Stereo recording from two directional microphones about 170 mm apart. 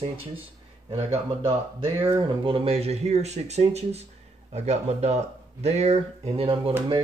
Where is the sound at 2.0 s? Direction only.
15° right (ahead or behind).